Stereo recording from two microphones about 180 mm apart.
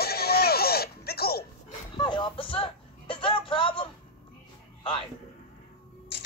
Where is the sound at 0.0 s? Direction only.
60° left (ahead or behind).